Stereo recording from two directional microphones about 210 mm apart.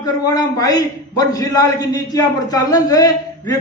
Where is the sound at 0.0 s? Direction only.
15° left (ahead or behind).